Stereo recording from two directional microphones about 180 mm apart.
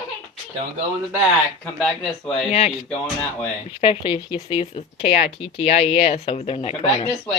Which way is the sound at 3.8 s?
30° left (ahead or behind).